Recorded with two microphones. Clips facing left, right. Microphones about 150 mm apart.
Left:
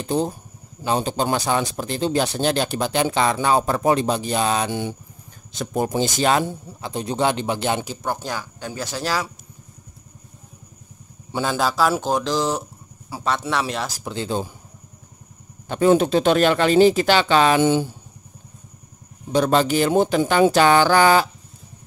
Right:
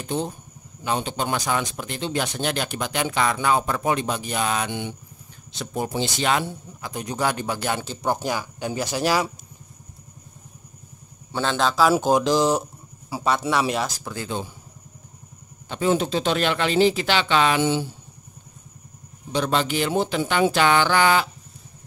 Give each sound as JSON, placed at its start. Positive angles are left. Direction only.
{"t": 0.0, "sound": "speech", "side_deg": 35}
{"t": 8.0, "sound": "speech", "side_deg": -15}
{"t": 11.3, "sound": "a man's voice", "side_deg": 5}
{"t": 11.9, "sound": "speech", "side_deg": -10}
{"t": 14.0, "sound": "speech", "side_deg": 25}
{"t": 15.7, "sound": "speech", "side_deg": 50}
{"t": 19.3, "sound": "speech", "side_deg": 45}